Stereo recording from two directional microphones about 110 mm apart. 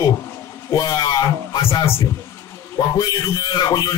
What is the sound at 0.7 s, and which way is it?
Speech, 30° left (ahead or behind).